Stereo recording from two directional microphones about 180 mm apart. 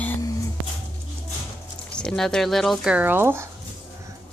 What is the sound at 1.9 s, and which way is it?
Speech, 5° left (ahead or behind).